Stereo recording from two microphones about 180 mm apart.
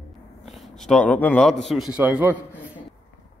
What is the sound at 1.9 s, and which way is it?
Speech, 10° right (ahead or behind).